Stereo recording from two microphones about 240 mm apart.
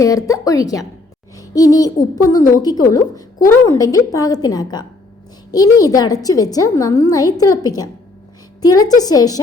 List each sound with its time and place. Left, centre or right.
0.0 s a woman's voice: centre